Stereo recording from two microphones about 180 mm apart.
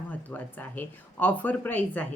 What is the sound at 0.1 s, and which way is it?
Speech, 10° left (ahead or behind).